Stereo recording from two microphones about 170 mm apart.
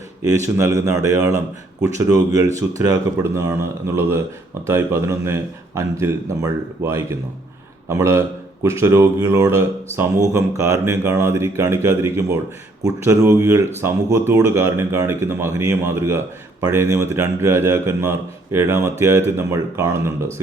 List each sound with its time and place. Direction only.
0.4 s speech: 20° right (ahead or behind)